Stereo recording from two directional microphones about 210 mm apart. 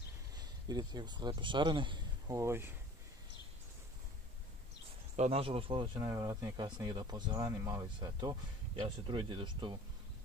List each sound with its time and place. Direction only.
0.4 s speech: 20° right (ahead or behind)
5.1 s speech: 30° right (ahead or behind)